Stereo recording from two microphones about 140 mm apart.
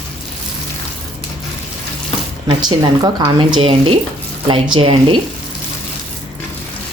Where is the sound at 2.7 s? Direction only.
40° right (ahead or behind).